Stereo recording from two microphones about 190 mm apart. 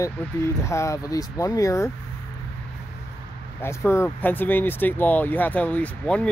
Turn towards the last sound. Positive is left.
turn(degrees=5)  # may be behind; listen again after turning